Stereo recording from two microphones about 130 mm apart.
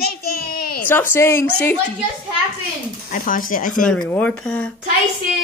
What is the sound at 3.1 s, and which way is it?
Speech, 90° left.